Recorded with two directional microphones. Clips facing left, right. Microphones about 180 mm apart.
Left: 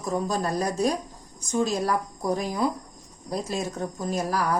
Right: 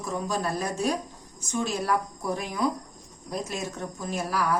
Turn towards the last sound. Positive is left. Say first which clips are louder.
# left 3 dB
turn(degrees=40)  # may be behind; listen again after turning